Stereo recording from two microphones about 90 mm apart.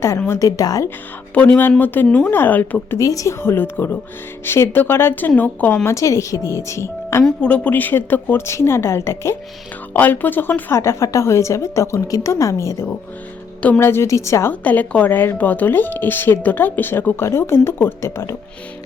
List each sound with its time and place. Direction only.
0.3 s a woman's voice: 40° left (ahead or behind)
1.8 s speech: 20° left (ahead or behind)
3.0 s a woman's voice: 40° left (ahead or behind)
3.4 s speech: 25° left (ahead or behind)
5.9 s a woman's voice: 35° left (ahead or behind)
7.4 s a woman's voice: 15° left (ahead or behind); by 12.9 s 35° left (ahead or behind)
13.6 s speech: 20° left (ahead or behind)
14.5 s speech: 15° left (ahead or behind)